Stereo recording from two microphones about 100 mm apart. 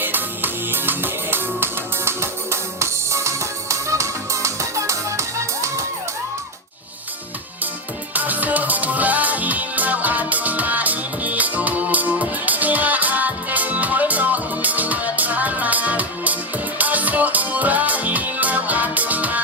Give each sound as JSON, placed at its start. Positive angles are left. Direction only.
{"t": 0.0, "sound": "music", "side_deg": -20}
{"t": 8.1, "sound": "music", "side_deg": -15}